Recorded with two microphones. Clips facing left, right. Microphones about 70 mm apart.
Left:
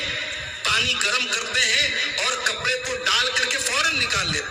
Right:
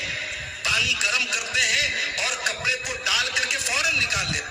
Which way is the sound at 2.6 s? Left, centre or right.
Left.